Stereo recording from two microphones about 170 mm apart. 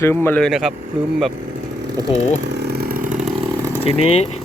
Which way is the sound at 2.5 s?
70° right (ahead or behind).